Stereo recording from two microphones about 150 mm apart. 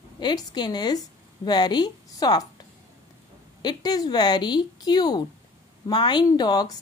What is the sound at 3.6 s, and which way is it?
A woman's voice, 25° left (ahead or behind).